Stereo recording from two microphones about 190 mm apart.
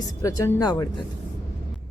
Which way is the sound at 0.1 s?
15° left (ahead or behind).